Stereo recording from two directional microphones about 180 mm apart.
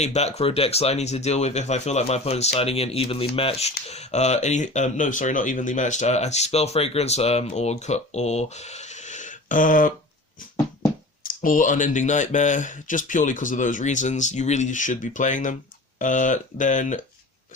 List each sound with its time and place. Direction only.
0.0 s speech: 35° left (ahead or behind)
11.2 s speech: 50° left (ahead or behind)